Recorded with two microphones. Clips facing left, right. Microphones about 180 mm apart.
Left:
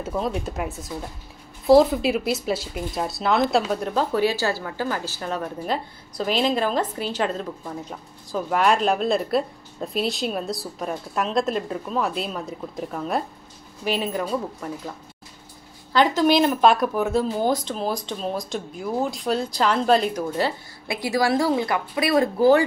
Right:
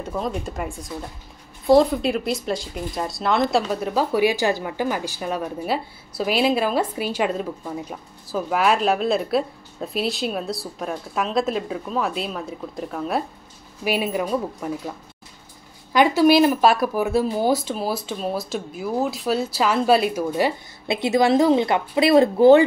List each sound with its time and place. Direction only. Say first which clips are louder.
0.0 s speech: left 1 dB; centre (ahead or behind)
15.9 s speech: right 3 dB; 10° right (ahead or behind)
20.8 s a woman's voice: right 4 dB; 25° right (ahead or behind)